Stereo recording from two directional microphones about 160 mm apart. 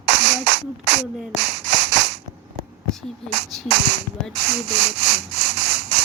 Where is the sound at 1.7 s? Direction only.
90° right.